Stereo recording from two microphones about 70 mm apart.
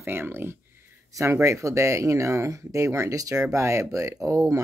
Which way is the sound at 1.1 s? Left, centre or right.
Right.